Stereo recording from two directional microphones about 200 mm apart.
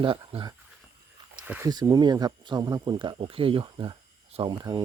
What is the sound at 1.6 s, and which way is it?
Speech, 20° right (ahead or behind).